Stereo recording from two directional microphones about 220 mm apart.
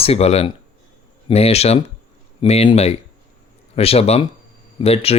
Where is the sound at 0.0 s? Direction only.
30° left (ahead or behind).